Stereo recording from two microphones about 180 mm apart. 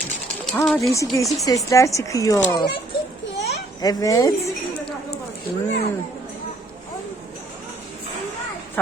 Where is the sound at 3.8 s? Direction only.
20° left (ahead or behind).